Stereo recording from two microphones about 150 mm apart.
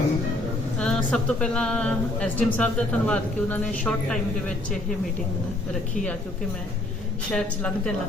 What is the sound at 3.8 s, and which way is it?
Speech, 5° left (ahead or behind).